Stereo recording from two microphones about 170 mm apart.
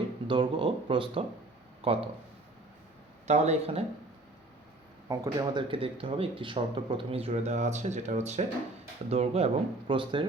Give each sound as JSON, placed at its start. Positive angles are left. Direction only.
{"t": 0.3, "sound": "speech", "side_deg": -30}
{"t": 3.2, "sound": "speech", "side_deg": -40}
{"t": 5.0, "sound": "speech", "side_deg": -20}